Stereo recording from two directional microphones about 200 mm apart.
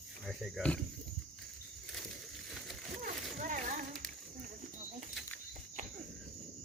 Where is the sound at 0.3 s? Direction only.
Centre (ahead or behind).